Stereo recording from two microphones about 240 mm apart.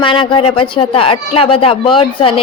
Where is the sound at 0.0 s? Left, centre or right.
Left.